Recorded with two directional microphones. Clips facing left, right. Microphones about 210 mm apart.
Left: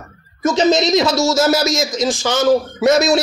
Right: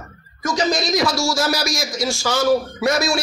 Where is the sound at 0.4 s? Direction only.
25° left (ahead or behind).